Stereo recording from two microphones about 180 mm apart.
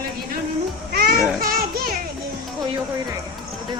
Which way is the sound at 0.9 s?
60° right (ahead or behind).